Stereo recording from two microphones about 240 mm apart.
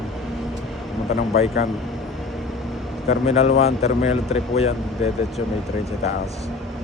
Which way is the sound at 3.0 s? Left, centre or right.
Left.